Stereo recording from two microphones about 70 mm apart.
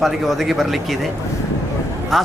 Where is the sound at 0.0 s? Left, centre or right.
Centre.